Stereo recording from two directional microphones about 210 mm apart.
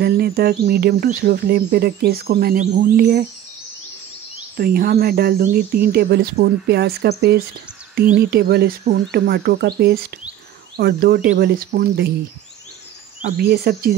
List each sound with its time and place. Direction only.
0.0 s speech: 50° right (ahead or behind)
4.6 s speech: 45° right (ahead or behind)
13.4 s speech: 50° right (ahead or behind)